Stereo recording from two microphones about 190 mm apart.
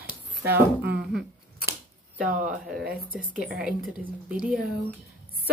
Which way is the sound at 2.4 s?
Centre (ahead or behind).